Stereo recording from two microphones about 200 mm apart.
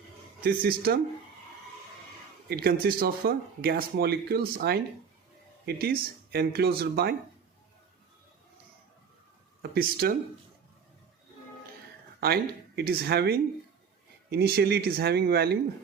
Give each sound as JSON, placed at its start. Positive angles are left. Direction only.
{"t": 0.4, "sound": "speech", "side_deg": -50}
{"t": 2.5, "sound": "speech", "side_deg": -50}
{"t": 9.6, "sound": "speech", "side_deg": -50}
{"t": 12.2, "sound": "speech", "side_deg": -50}